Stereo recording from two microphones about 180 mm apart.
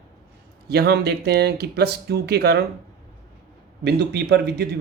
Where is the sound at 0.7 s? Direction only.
65° right (ahead or behind).